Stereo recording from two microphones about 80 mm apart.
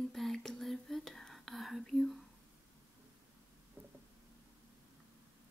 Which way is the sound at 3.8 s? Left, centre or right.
Right.